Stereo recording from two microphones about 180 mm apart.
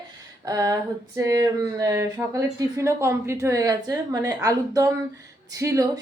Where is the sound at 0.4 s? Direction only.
20° right (ahead or behind).